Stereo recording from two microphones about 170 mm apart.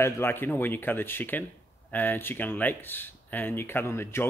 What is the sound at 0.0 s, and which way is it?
Speech, 15° left (ahead or behind).